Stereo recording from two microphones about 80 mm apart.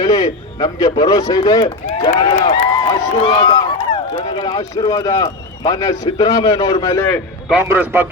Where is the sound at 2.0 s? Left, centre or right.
Left.